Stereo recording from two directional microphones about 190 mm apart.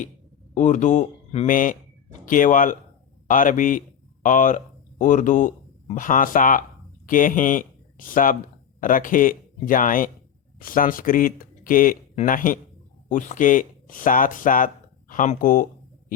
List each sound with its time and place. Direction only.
0.5 s a man's voice: 40° left (ahead or behind)